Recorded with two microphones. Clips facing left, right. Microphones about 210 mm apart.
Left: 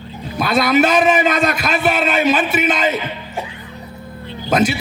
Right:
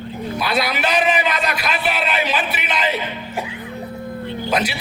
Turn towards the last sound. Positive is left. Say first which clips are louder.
# left 5 dB
turn(degrees=45)  # may be behind; listen again after turning